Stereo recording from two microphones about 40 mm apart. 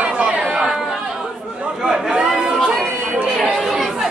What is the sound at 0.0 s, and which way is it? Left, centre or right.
Chatter, right.